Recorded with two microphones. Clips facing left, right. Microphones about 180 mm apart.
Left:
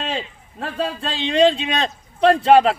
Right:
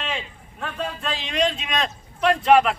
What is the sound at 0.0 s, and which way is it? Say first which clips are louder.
A man's voice: left 4 dB; 35° left (ahead or behind).